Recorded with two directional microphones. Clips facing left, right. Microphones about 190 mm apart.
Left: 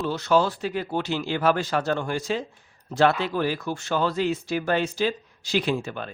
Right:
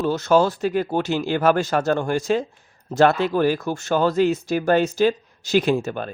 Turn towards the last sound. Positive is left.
turn(degrees=-45)  # may be behind; listen again after turning